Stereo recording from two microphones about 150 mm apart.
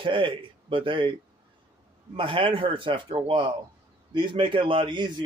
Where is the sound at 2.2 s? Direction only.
35° right (ahead or behind).